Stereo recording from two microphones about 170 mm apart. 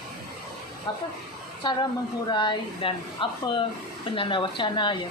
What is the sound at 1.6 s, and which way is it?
Speech, 25° left (ahead or behind).